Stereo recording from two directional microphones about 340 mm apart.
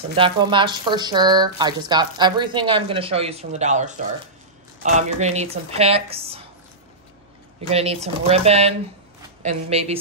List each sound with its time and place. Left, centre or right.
0.1 s speech: centre
7.7 s speech: centre